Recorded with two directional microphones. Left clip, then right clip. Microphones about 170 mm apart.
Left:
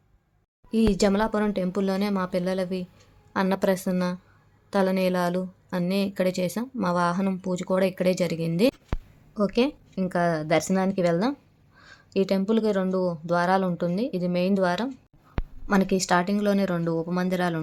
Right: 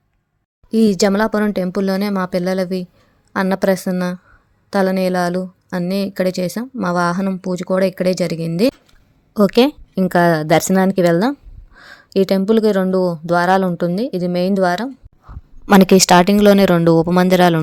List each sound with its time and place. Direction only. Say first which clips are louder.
0.7 s a woman's voice: right 8 dB; 45° right (ahead or behind)
9.3 s a woman's voice: right 11 dB; 55° right (ahead or behind)
15.6 s speech: right 14 dB; 65° right (ahead or behind)